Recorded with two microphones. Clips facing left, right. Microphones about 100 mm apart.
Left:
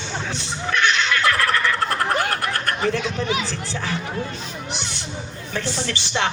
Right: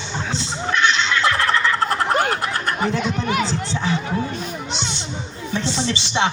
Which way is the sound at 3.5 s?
20° right (ahead or behind).